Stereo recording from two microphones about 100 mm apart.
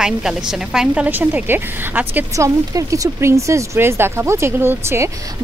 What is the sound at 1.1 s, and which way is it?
Speech, 20° right (ahead or behind).